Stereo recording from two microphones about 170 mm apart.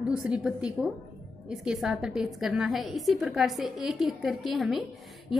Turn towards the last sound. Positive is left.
turn(degrees=0)  # may be behind; listen again after turning